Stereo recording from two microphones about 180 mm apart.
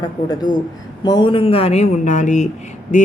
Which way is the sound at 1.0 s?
25° left (ahead or behind).